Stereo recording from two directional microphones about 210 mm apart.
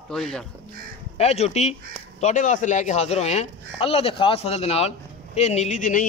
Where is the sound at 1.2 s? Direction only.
30° left (ahead or behind).